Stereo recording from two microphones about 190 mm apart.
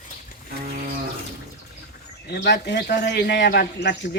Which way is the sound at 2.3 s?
60° left (ahead or behind).